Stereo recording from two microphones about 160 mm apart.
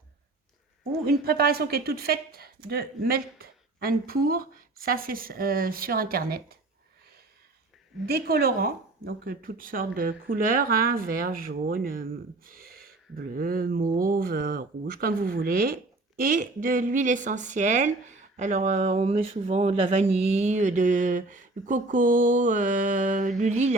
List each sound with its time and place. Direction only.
1.0 s a woman's voice: 70° right (ahead or behind)
8.0 s speech: 75° right (ahead or behind); by 23.7 s 45° right (ahead or behind)